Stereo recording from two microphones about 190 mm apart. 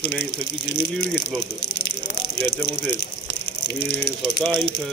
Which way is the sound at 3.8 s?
60° left (ahead or behind).